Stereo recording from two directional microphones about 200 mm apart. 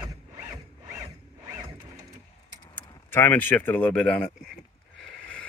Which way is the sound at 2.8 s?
15° left (ahead or behind).